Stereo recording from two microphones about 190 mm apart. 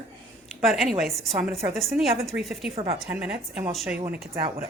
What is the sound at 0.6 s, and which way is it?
A woman's voice, centre (ahead or behind).